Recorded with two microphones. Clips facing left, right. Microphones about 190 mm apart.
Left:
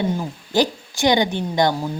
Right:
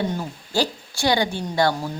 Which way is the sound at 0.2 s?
15° left (ahead or behind).